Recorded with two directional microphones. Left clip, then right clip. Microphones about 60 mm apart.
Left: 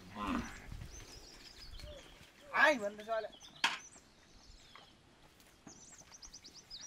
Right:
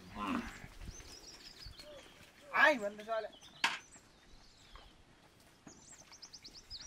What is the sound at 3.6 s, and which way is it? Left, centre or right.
Chop, centre.